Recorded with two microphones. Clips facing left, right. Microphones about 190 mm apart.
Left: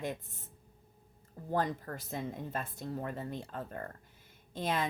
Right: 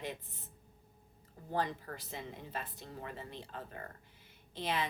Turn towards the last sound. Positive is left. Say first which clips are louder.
# left 3 dB
turn(degrees=45)  # may be behind; listen again after turning